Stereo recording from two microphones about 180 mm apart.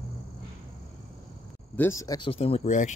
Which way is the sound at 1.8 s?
15° left (ahead or behind).